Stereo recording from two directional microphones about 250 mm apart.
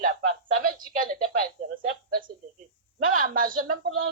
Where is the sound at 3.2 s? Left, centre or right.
Right.